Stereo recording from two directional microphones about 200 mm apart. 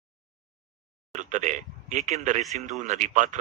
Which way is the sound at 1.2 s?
35° right (ahead or behind).